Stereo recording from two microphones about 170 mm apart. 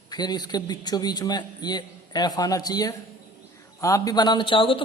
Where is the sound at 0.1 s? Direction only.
25° left (ahead or behind).